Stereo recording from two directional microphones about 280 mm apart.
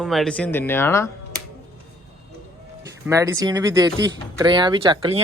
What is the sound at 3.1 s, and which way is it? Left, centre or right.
Speech, centre.